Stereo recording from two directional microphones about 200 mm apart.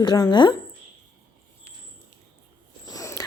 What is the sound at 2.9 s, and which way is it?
Biting, 15° left (ahead or behind).